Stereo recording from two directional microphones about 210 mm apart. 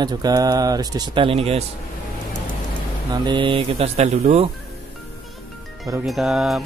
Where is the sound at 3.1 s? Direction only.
20° right (ahead or behind).